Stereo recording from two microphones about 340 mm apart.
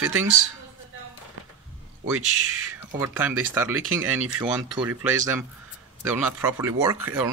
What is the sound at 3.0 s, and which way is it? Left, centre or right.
Speech, centre.